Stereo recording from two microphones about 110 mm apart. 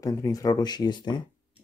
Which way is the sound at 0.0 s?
30° left (ahead or behind).